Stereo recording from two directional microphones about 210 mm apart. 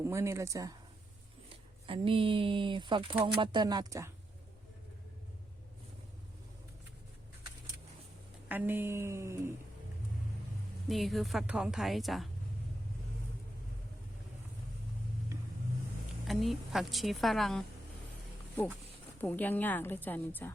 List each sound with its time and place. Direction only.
0.0 s speech: 15° right (ahead or behind)
1.9 s speech: 25° right (ahead or behind)
8.4 s speech: 10° right (ahead or behind)
10.8 s a woman's voice: centre (ahead or behind)
16.2 s a woman's voice: centre (ahead or behind)
19.2 s a woman's voice: 10° left (ahead or behind)